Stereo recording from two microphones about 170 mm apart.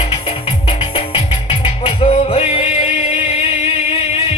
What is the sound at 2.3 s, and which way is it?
Music, 35° left (ahead or behind).